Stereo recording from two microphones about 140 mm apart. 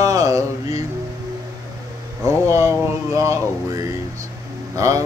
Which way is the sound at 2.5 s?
20° right (ahead or behind).